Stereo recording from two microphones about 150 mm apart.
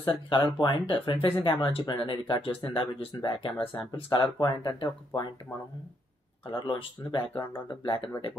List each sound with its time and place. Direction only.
0.0 s speech: 35° left (ahead or behind)
6.4 s speech: 35° left (ahead or behind)